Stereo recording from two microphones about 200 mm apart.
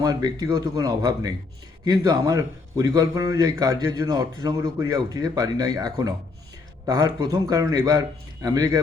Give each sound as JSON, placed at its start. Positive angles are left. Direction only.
{"t": 0.0, "sound": "a man's voice", "side_deg": -20}